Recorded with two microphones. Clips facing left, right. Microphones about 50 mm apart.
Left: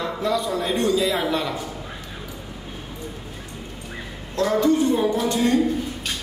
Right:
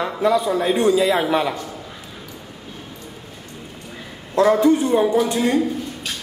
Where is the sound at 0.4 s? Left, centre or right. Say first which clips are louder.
Right 4 dB; centre.